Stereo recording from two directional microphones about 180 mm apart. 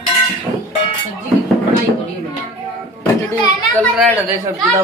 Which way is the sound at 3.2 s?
10° left (ahead or behind).